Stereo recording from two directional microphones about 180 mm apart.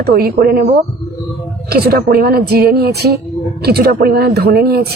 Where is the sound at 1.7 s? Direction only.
60° right (ahead or behind).